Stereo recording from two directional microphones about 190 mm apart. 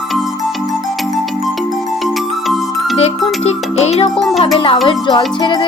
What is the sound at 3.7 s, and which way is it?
Speech, 35° left (ahead or behind).